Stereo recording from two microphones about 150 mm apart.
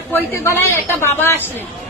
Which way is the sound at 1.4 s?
15° right (ahead or behind).